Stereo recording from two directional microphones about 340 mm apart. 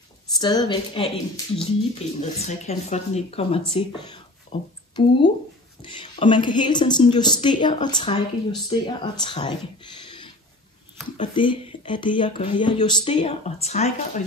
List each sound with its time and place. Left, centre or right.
0.4 s speech: centre
10.0 s a sound: centre
11.1 s speech: centre